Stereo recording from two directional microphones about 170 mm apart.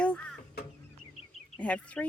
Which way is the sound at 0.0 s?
5° left (ahead or behind).